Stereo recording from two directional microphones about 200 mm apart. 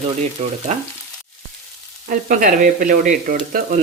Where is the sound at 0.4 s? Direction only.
30° right (ahead or behind).